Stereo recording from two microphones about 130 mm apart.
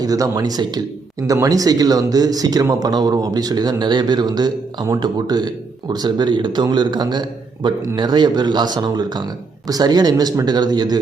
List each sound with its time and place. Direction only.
0.0 s speech: 25° right (ahead or behind)